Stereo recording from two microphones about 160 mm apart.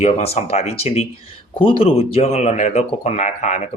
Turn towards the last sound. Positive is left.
turn(degrees=50)  # may be behind; listen again after turning